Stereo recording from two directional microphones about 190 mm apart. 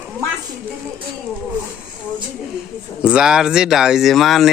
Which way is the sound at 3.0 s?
5° right (ahead or behind).